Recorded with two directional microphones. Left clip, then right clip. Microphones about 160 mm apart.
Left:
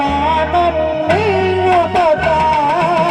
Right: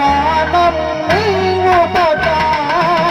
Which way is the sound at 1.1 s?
5° right (ahead or behind).